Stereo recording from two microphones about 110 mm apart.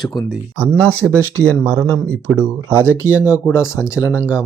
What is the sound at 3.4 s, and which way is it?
Speech, 25° left (ahead or behind).